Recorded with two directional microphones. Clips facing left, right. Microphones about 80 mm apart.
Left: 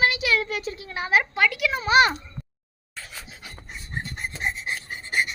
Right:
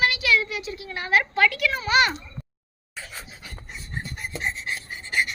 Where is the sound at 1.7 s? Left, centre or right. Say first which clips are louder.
Left 4 dB; left.